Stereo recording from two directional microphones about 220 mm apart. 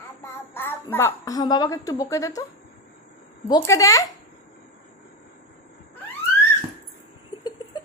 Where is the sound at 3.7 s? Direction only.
15° left (ahead or behind).